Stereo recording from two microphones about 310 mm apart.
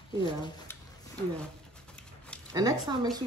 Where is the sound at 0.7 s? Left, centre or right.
Centre.